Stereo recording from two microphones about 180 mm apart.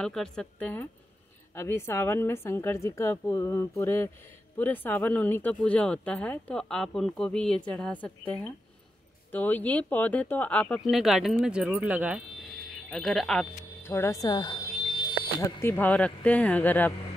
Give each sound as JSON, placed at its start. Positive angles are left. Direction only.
{"t": 0.0, "sound": "speech", "side_deg": 5}
{"t": 13.8, "sound": "speech", "side_deg": 15}